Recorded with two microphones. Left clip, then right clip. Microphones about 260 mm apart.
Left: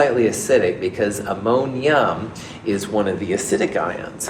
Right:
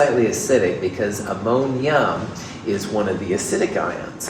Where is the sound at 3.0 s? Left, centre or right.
Left.